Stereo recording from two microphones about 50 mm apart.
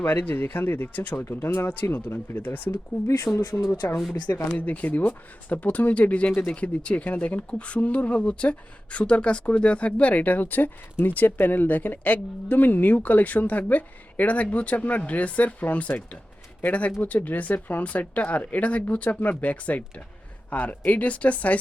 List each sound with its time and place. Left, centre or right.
0.0 s speech: left
1.2 s speech: left
2.1 s speech: left
3.3 s speech: left
3.8 s speech: left
4.5 s speech: left